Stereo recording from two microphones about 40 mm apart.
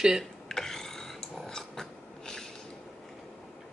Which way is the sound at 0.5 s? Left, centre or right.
Centre.